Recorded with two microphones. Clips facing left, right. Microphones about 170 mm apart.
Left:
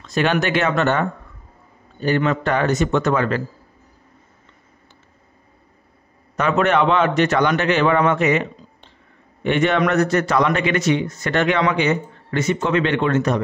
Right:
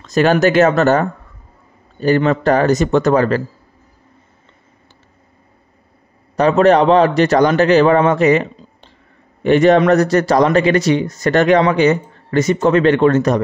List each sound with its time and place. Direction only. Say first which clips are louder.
0.0 s a man's voice: right 7 dB; 40° right (ahead or behind)
6.3 s a man's voice: right 7 dB; 35° right (ahead or behind)